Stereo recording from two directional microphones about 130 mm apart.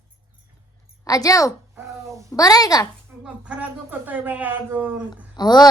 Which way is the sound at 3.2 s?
10° right (ahead or behind).